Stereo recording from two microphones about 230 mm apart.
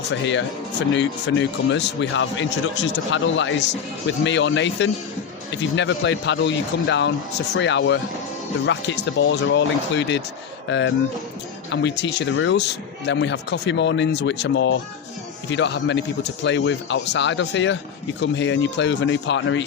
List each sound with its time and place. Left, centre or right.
0.1 s speech: left